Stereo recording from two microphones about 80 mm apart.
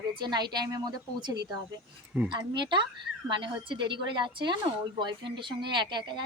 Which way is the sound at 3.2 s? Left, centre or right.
Right.